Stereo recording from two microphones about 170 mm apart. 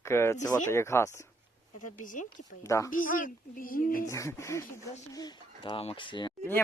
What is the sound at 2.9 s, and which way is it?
A child's voice, 50° left (ahead or behind).